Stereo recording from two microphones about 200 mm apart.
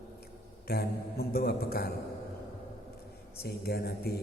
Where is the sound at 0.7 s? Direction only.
50° left (ahead or behind).